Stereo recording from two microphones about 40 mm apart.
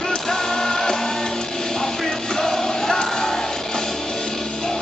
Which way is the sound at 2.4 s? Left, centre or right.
Centre.